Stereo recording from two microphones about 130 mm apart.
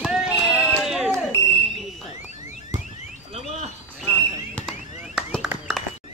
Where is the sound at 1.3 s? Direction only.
15° left (ahead or behind).